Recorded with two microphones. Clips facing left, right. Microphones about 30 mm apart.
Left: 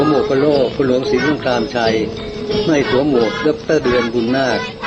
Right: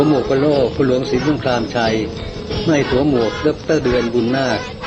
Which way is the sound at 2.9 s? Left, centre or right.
Left.